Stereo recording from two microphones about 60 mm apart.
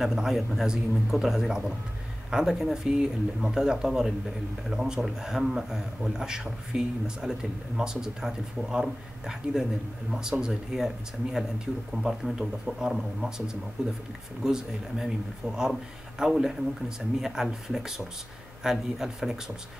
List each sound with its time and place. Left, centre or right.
0.0 s a man's voice: centre
11.9 s a man's voice: centre